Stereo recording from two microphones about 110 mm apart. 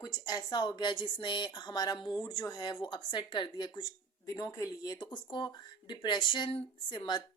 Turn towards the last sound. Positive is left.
turn(degrees=55)  # may be behind; listen again after turning